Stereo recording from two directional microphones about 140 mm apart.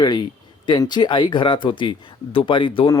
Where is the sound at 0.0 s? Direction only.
30° left (ahead or behind).